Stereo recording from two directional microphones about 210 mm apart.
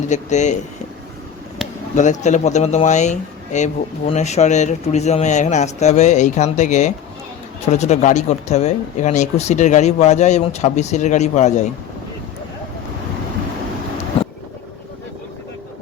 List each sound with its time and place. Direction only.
0.1 s speech: 35° left (ahead or behind)
2.0 s speech: 35° left (ahead or behind)